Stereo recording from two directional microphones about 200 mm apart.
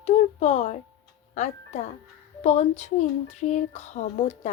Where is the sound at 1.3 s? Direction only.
35° left (ahead or behind).